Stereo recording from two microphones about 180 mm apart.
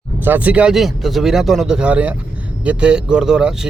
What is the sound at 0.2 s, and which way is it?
Speech, 10° right (ahead or behind).